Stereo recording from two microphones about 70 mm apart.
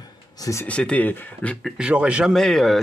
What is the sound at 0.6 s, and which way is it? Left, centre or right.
Speech, centre.